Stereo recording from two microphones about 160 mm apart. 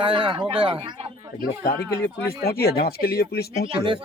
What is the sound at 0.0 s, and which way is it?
Speech, 30° right (ahead or behind).